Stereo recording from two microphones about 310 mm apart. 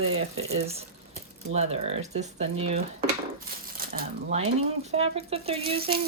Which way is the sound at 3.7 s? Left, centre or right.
Right.